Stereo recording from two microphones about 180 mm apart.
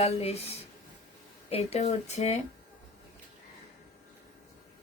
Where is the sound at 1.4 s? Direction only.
35° left (ahead or behind).